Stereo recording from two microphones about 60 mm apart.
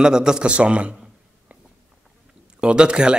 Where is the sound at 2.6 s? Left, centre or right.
Centre.